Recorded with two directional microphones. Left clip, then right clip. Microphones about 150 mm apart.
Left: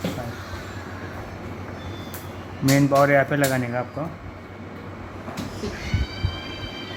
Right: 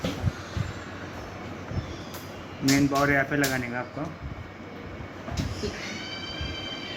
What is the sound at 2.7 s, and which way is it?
Speech, 75° left (ahead or behind).